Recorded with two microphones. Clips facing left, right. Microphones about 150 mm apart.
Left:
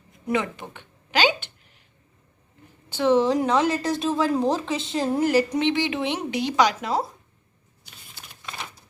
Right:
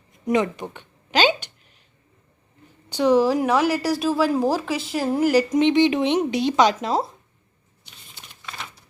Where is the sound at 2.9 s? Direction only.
15° right (ahead or behind).